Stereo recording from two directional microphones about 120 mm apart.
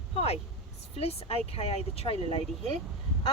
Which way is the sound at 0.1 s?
55° left (ahead or behind).